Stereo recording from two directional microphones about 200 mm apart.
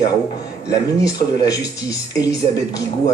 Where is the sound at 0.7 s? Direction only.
20° left (ahead or behind).